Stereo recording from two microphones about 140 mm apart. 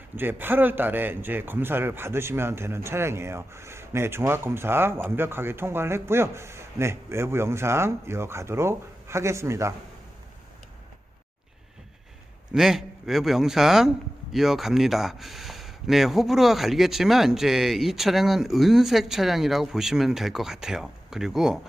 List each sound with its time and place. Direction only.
0.2 s speech: 15° right (ahead or behind)
12.5 s speech: 5° right (ahead or behind)